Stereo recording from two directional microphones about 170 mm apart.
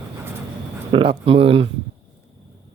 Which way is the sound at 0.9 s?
30° right (ahead or behind).